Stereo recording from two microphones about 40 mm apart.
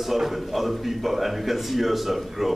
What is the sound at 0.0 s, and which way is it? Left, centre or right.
A man's voice, centre.